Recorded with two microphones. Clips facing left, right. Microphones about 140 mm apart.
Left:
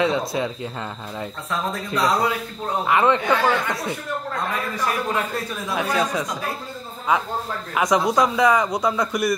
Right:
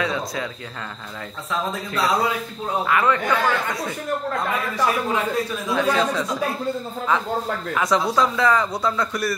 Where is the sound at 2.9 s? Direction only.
25° left (ahead or behind).